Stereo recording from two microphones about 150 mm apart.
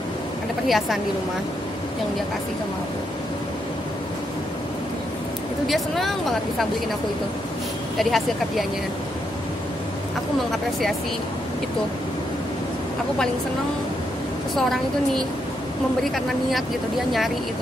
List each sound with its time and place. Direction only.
0.7 s a woman's voice: centre (ahead or behind)
5.7 s a woman's voice: centre (ahead or behind)
8.0 s a woman's voice: centre (ahead or behind)
14.5 s a woman's voice: centre (ahead or behind)